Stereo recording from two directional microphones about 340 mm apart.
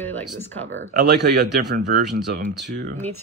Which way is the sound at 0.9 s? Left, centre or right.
Right.